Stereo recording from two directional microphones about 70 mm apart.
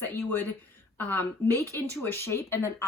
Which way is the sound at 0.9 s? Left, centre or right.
Left.